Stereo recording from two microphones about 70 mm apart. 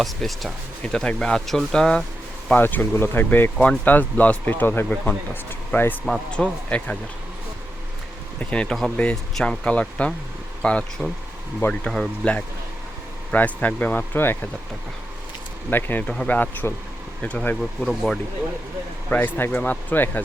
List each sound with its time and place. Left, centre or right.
0.0 s speech: centre
2.6 s speech: left
6.3 s speech: centre
8.4 s speech: centre
11.9 s speech: centre
13.3 s speech: left
15.7 s speech: left
16.0 s speech: centre
17.6 s speech: centre
19.1 s speech: left